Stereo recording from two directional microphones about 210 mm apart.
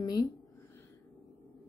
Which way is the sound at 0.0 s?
20° left (ahead or behind).